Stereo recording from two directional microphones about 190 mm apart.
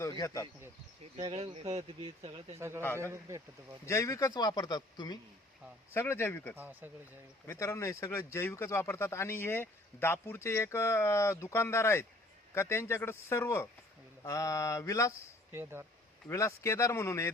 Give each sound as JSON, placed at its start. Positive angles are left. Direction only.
{"t": 0.0, "sound": "speech", "side_deg": 15}
{"t": 1.1, "sound": "speech", "side_deg": -35}
{"t": 2.6, "sound": "speech", "side_deg": -15}
{"t": 2.8, "sound": "speech", "side_deg": 10}
{"t": 3.1, "sound": "speech", "side_deg": -15}
{"t": 3.8, "sound": "a man's voice", "side_deg": 15}
{"t": 6.6, "sound": "speech", "side_deg": -10}
{"t": 7.4, "sound": "speech", "side_deg": 15}
{"t": 15.5, "sound": "speech", "side_deg": -15}
{"t": 16.3, "sound": "speech", "side_deg": 15}